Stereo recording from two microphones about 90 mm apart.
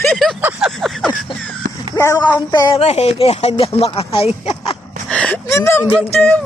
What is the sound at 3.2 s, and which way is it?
Speech, 90° left.